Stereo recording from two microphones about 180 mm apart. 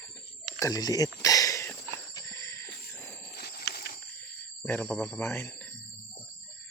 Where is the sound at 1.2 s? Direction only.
20° left (ahead or behind).